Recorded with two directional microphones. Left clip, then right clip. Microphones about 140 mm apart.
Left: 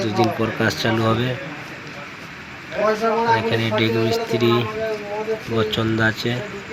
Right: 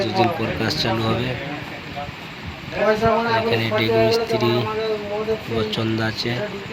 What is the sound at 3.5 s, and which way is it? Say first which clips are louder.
A man's voice: right 1 dB; 10° left (ahead or behind).